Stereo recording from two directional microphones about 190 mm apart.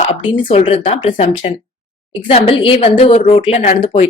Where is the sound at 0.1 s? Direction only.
30° left (ahead or behind).